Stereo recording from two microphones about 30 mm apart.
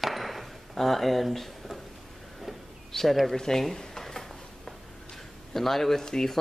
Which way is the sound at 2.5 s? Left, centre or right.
Centre.